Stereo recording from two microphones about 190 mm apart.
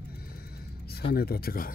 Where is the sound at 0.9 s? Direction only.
55° left (ahead or behind).